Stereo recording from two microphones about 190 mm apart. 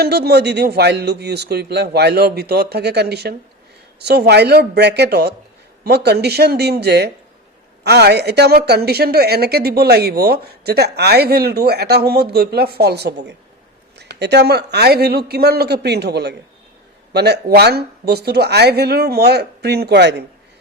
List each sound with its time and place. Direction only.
0.0 s a woman's voice: 60° right (ahead or behind)